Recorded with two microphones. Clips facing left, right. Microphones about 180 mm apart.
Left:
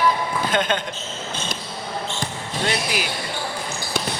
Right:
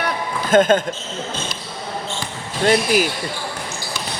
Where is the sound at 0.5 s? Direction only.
45° right (ahead or behind).